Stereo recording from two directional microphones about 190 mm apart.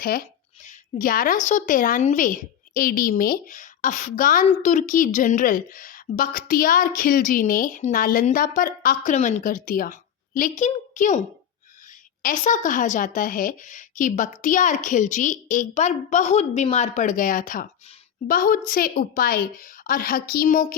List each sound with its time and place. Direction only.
0.0 s a woman's voice: 50° left (ahead or behind)
12.2 s a woman's voice: 40° left (ahead or behind)